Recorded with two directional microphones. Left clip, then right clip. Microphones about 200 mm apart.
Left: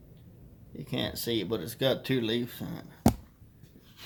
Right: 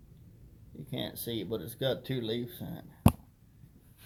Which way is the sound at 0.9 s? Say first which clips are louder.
Left 6 dB; 5° left (ahead or behind).